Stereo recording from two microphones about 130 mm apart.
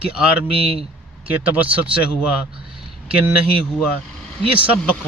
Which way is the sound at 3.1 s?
10° right (ahead or behind).